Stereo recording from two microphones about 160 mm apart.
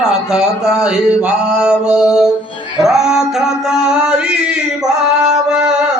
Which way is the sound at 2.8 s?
5° right (ahead or behind).